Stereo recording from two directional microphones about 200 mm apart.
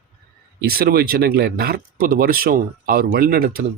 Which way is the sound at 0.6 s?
50° right (ahead or behind).